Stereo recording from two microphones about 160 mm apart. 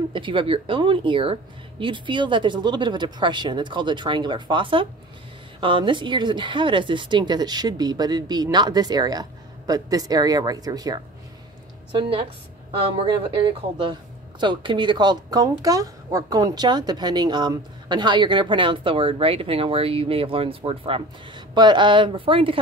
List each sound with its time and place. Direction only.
0.1 s speech: 30° right (ahead or behind)
12.0 s speech: 35° right (ahead or behind)